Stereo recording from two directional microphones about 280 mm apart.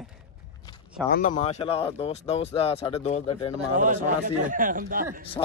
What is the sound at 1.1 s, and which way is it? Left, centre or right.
Speech, left.